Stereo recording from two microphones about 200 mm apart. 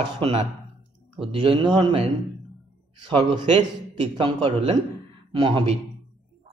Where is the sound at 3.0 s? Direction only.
25° right (ahead or behind).